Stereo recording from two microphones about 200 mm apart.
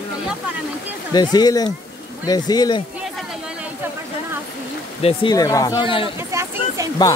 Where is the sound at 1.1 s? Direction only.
20° left (ahead or behind).